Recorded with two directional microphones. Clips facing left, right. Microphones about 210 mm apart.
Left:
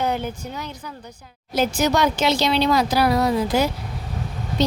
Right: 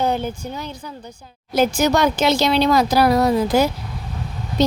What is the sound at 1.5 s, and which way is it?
Speech, 50° right (ahead or behind).